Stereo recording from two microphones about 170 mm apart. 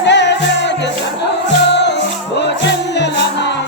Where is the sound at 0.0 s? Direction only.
90° left.